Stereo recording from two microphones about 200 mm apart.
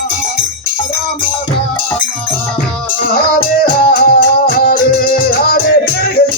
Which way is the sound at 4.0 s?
45° left (ahead or behind).